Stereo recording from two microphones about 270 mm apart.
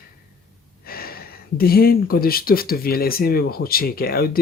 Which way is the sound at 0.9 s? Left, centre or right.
Left.